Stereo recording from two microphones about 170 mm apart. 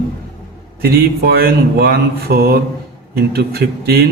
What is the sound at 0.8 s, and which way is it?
Speech, 70° right (ahead or behind).